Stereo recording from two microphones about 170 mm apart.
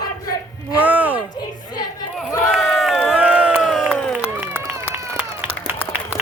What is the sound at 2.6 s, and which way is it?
Crowd, centre (ahead or behind).